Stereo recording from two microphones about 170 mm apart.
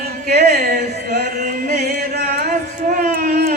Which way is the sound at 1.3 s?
55° right (ahead or behind).